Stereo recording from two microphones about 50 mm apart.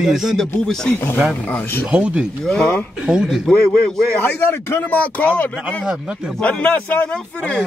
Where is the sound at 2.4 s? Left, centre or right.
Centre.